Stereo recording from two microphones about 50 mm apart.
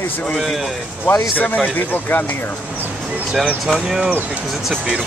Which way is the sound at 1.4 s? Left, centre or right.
Left.